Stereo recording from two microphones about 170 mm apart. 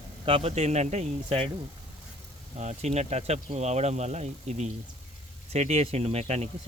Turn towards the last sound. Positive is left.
turn(degrees=-40)  # may be behind; listen again after turning